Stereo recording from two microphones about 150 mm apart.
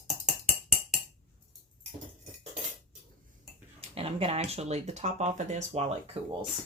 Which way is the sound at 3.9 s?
40° right (ahead or behind).